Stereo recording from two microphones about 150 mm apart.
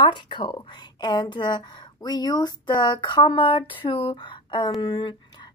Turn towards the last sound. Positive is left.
turn(degrees=30)  # may be behind; listen again after turning